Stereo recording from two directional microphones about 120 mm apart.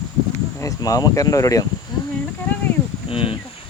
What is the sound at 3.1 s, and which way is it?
Speech, 50° left (ahead or behind).